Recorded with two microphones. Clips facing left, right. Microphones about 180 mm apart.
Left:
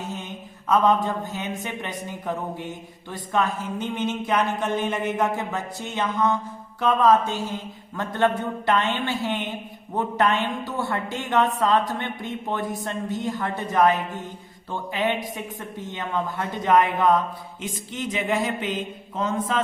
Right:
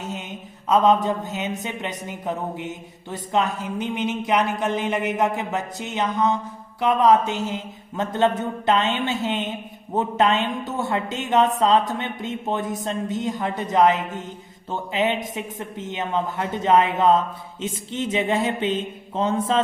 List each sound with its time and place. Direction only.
0.1 s mantra: 20° right (ahead or behind)
1.0 s a woman's voice: 20° right (ahead or behind)